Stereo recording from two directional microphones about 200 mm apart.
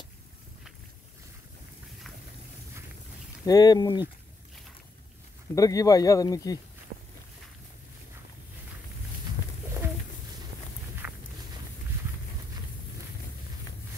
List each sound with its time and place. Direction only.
3.4 s speech: 20° left (ahead or behind)
5.5 s speech: 15° left (ahead or behind)
9.8 s bird: 10° right (ahead or behind)
11.0 s walk: 5° right (ahead or behind)